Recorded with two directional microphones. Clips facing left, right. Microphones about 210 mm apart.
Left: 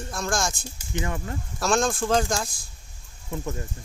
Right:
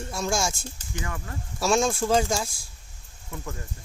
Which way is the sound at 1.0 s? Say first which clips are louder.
Left 5 dB; 25° left (ahead or behind).